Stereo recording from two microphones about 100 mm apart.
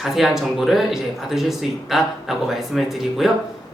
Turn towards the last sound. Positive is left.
turn(degrees=-5)  # may be behind; listen again after turning